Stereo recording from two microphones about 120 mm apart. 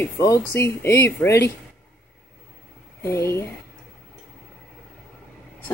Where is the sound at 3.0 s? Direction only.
25° left (ahead or behind).